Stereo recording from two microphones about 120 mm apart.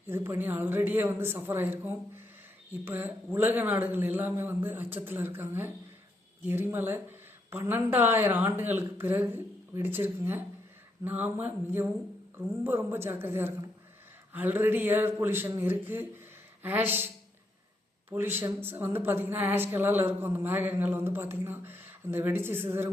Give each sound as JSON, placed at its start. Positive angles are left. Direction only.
{"t": 0.1, "sound": "speech", "side_deg": -20}
{"t": 18.3, "sound": "speech", "side_deg": -20}